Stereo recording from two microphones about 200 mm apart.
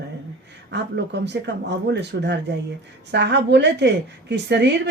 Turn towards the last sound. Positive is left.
turn(degrees=-60)  # may be behind; listen again after turning